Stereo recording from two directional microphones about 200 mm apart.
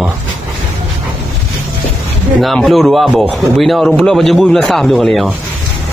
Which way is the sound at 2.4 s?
Centre (ahead or behind).